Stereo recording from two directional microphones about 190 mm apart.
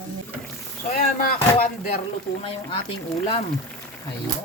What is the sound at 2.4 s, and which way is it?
Speech, 30° left (ahead or behind).